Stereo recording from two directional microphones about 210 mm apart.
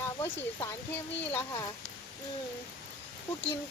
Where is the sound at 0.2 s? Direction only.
10° left (ahead or behind).